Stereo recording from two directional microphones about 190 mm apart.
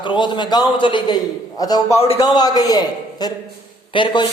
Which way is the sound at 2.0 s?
30° left (ahead or behind).